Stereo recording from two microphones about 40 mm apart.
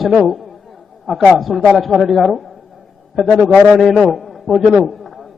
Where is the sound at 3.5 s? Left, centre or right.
Right.